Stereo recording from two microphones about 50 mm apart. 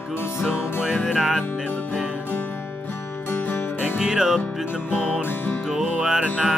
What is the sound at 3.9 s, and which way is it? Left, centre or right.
Music, centre.